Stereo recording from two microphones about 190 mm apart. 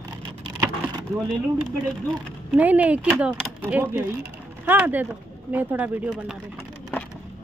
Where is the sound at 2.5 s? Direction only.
10° right (ahead or behind).